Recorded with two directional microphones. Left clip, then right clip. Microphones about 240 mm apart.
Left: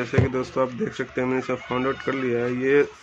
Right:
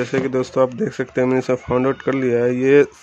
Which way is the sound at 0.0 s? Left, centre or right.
Right.